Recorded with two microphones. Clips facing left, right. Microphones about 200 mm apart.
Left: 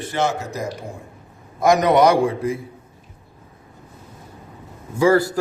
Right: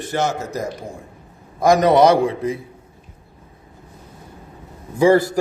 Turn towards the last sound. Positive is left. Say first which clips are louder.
# right 2 dB
turn(degrees=-20)  # may be behind; listen again after turning